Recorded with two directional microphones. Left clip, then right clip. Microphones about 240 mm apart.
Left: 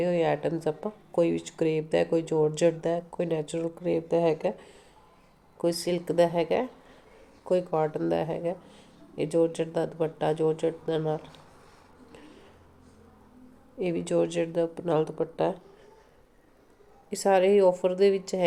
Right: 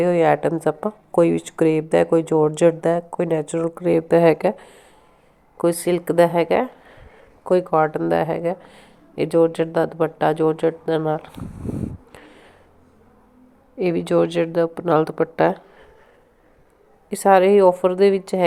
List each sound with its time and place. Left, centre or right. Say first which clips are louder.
0.0 s speech: right 9 dB; centre
12.1 s a sound: right 6 dB; centre
13.7 s speech: right 8 dB; centre
17.1 s speech: right 8 dB; centre